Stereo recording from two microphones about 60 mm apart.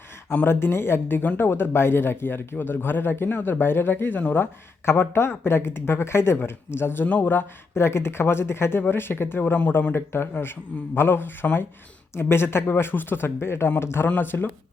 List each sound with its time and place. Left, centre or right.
0.4 s a man's voice: left
7.7 s a man's voice: left
9.6 s speech: left
9.9 s a man's voice: left